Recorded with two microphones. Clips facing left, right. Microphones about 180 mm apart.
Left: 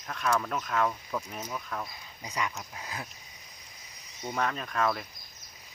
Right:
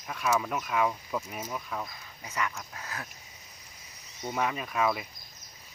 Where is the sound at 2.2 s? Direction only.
15° left (ahead or behind).